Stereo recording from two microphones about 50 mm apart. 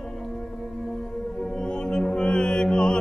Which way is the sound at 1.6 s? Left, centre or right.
Centre.